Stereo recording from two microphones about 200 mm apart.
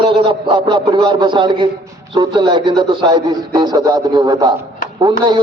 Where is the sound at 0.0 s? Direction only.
25° right (ahead or behind).